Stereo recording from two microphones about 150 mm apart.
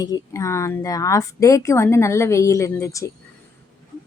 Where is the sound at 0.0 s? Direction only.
20° left (ahead or behind).